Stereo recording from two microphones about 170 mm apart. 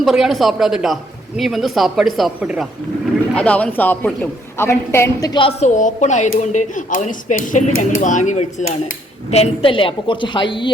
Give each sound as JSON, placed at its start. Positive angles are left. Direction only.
{"t": 0.0, "sound": "speech", "side_deg": 0}
{"t": 3.3, "sound": "a woman's voice", "side_deg": 5}